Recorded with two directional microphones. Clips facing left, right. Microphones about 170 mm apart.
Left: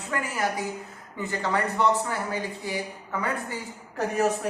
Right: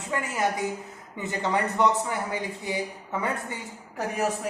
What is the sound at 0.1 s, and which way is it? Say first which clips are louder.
A woman's voice: right 1 dB; 20° right (ahead or behind).